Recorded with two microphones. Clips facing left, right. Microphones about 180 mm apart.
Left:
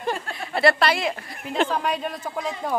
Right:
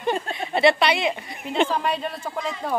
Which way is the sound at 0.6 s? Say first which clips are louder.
Right 1 dB; centre (ahead or behind).